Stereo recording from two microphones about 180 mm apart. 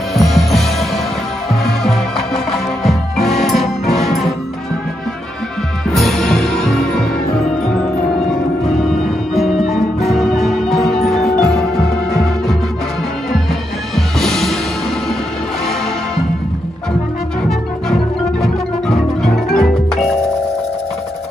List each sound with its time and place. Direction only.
0.1 s music: centre (ahead or behind)
5.9 s music: centre (ahead or behind)
13.9 s music: centre (ahead or behind)
18.4 s music: centre (ahead or behind)